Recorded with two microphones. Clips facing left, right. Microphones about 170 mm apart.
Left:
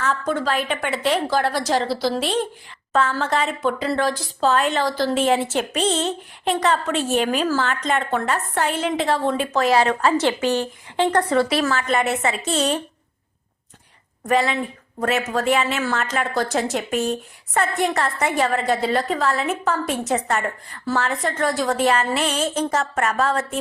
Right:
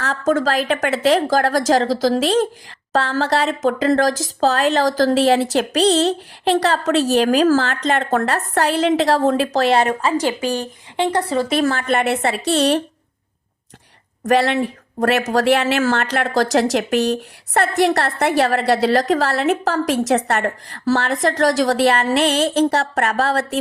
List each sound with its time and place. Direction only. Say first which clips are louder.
0.0 s a woman's voice: right 4 dB; 40° right (ahead or behind)
0.7 s speech: right 6 dB; 90° right
1.7 s a woman's voice: right 5 dB; 40° right (ahead or behind)
2.1 s speech: right 6 dB; 90° right
2.9 s a woman's voice: right 2 dB; 35° right (ahead or behind)
8.8 s a woman's voice: right 6 dB; 80° right
9.0 s a woman's voice: right 5 dB; 40° right (ahead or behind)
9.6 s speech: even; 20° right (ahead or behind)
10.2 s a woman's voice: even; 10° right (ahead or behind)
11.7 s a woman's voice: right 2 dB; 55° right (ahead or behind)
14.3 s a woman's voice: right 4 dB; 70° right (ahead or behind); by 16.6 s 90° right
16.7 s a woman's voice: right 5 dB; 70° right (ahead or behind)